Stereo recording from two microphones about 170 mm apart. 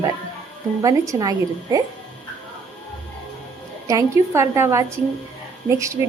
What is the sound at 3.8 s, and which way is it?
A woman's voice, 15° right (ahead or behind).